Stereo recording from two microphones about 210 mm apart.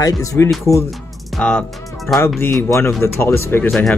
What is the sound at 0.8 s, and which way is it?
Music, centre (ahead or behind).